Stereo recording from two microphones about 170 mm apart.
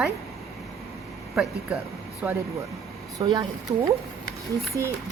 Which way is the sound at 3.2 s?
25° right (ahead or behind).